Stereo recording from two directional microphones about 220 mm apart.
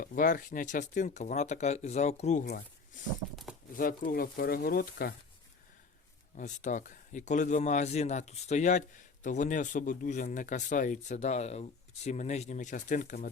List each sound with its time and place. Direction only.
0.0 s speech: 40° left (ahead or behind)
6.3 s speech: 35° left (ahead or behind)